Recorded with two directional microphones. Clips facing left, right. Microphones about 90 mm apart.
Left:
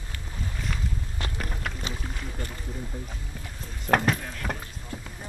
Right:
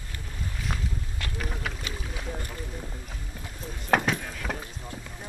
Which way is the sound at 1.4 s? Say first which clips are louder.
Right 1 dB; centre (ahead or behind).